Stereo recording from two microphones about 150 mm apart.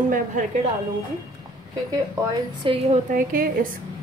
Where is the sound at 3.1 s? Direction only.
70° right (ahead or behind).